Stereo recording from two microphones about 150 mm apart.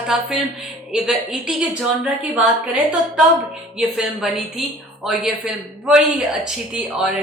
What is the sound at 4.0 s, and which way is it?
Speech, centre (ahead or behind).